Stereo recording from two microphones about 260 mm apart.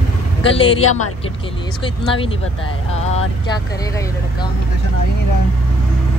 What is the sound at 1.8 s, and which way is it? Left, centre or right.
Music, left.